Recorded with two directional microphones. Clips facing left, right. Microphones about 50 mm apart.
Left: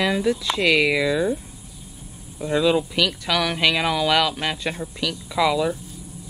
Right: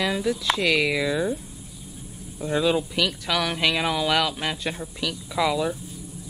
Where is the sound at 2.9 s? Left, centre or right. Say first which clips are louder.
Left 3 dB; centre.